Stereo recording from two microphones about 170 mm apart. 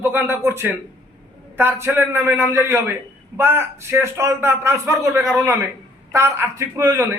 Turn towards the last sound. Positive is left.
turn(degrees=-20)  # may be behind; listen again after turning